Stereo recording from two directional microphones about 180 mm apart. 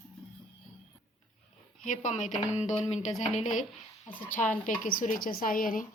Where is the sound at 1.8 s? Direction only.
40° left (ahead or behind).